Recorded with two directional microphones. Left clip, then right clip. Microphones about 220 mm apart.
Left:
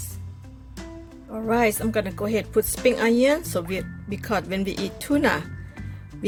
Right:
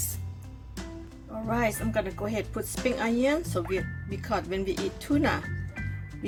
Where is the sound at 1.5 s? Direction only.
50° left (ahead or behind).